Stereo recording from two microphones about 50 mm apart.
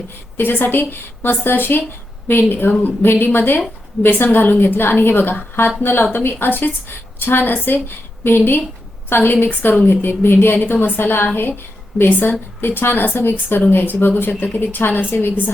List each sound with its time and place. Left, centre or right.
0.3 s a woman's voice: left